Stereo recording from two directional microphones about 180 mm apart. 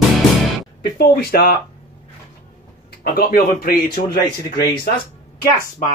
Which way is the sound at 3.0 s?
55° left (ahead or behind).